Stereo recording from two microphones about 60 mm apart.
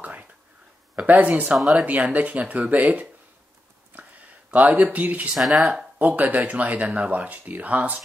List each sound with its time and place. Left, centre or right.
0.0 s whispering: right
1.0 s speech: right
1.6 s speech: centre
1.9 s speech: right
3.9 s a sound: right
4.5 s speech: right
5.3 s speech: centre
5.9 s speech: right